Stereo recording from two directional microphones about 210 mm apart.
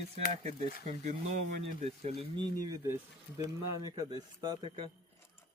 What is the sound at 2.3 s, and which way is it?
Speech, 20° right (ahead or behind).